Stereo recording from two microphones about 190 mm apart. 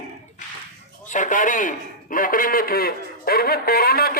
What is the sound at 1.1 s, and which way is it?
A man's voice, 45° left (ahead or behind).